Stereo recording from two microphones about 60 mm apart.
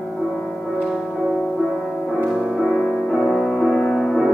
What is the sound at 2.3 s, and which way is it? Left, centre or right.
Music, centre.